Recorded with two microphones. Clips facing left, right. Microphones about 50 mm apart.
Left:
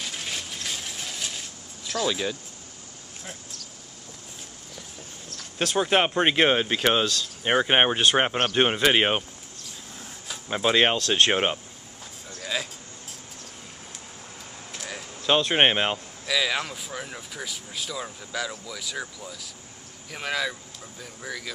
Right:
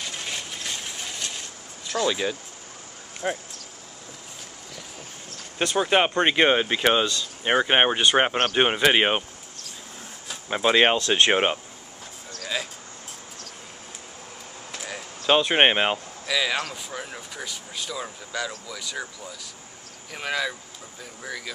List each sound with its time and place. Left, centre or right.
0.0 s a sound: centre
1.9 s speech: centre
3.2 s speech: right
5.6 s speech: centre
10.2 s speech: centre
14.8 s a sound: centre
16.6 s speech: centre